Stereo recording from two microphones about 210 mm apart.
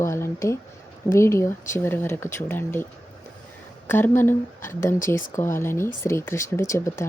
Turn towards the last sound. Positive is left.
turn(degrees=15)  # may be behind; listen again after turning